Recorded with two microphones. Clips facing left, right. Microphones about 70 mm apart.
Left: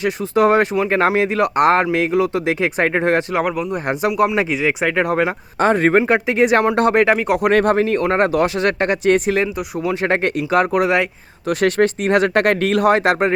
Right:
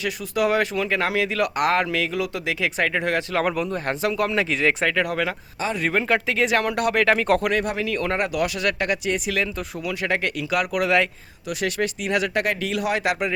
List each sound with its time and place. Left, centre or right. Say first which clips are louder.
0.0 s speech: left 7 dB; left
3.4 s speech: left 3 dB; centre
3.8 s speech: left 8 dB; centre
4.9 s speech: left 6 dB; left
5.5 s speech: left 11 dB; left
6.0 s speech: left 6 dB; left
7.1 s speech: left 2 dB; centre
7.5 s speech: left 9 dB; left
9.0 s speech: left 10 dB; left
9.3 s speech: left 6 dB; left
11.4 s speech: left 9 dB; left